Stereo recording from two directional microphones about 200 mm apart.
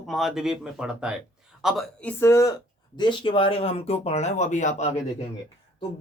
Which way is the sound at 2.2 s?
15° left (ahead or behind).